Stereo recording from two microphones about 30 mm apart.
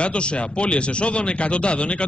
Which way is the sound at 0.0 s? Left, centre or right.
Left.